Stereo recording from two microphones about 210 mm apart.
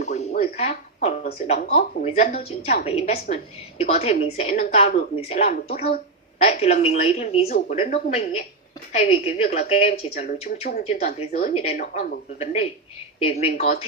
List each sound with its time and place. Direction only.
0.0 s a woman's voice: 35° left (ahead or behind)